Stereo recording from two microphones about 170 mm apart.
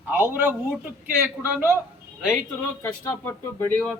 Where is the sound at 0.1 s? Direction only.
10° right (ahead or behind).